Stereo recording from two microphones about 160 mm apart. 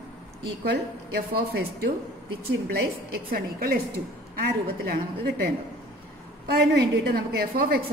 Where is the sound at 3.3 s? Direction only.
65° right (ahead or behind).